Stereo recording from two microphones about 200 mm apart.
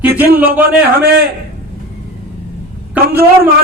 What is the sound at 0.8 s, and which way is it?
Speech, 50° right (ahead or behind).